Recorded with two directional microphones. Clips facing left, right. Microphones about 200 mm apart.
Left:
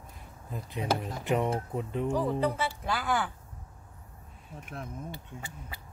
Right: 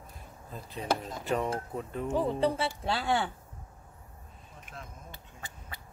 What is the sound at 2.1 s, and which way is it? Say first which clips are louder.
Speech: right 3 dB; 25° right (ahead or behind).